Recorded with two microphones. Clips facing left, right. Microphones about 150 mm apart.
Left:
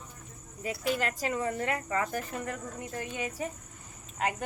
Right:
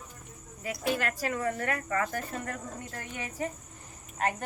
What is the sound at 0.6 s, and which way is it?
Speech, 20° left (ahead or behind).